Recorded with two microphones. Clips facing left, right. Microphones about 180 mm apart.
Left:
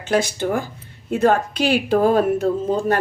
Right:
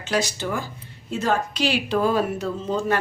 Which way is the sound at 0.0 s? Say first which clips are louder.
Left 5 dB; 55° left (ahead or behind).